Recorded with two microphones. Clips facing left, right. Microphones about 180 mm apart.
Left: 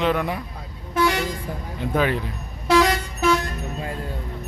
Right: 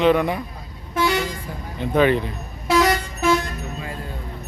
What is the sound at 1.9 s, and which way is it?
Speech, 5° left (ahead or behind).